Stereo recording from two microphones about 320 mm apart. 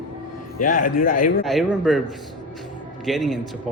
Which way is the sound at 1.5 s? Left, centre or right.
Centre.